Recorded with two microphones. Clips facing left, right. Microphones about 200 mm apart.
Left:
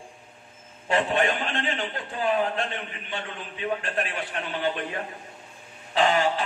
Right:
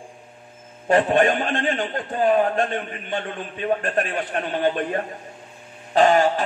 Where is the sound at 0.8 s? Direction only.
45° right (ahead or behind).